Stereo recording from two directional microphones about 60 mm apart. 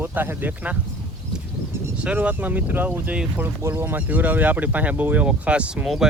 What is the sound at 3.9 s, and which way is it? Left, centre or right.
Speech, right.